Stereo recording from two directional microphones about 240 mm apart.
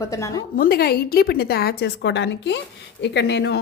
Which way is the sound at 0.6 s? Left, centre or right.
Left.